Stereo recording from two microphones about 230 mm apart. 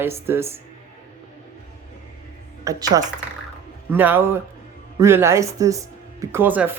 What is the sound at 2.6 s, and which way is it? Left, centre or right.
Speech, centre.